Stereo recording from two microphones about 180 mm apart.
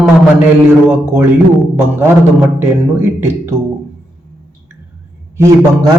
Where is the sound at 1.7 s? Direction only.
10° right (ahead or behind).